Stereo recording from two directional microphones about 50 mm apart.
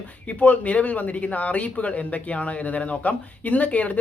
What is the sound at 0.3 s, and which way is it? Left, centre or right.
Speech, left.